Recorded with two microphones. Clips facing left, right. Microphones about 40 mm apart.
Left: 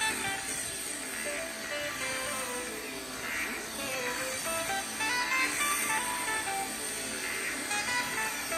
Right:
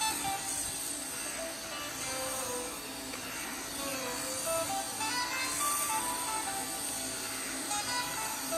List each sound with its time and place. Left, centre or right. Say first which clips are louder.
0.0 s music: left 2 dB; left
2.0 s music: left 3 dB; left
3.9 s music: left 6 dB; left
5.3 s music: left 5 dB; left
7.7 s music: left 4 dB; left
8.0 s vehicle: left 4 dB; left